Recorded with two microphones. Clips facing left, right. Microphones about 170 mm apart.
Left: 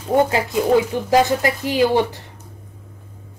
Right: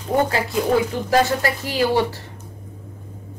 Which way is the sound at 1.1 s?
20° left (ahead or behind).